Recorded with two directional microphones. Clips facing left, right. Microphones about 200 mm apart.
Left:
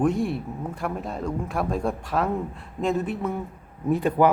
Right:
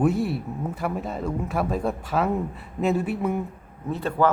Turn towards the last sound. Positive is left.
turn(degrees=15)  # may be behind; listen again after turning